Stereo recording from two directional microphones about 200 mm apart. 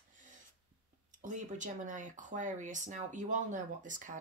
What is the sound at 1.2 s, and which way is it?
Speech, 40° right (ahead or behind).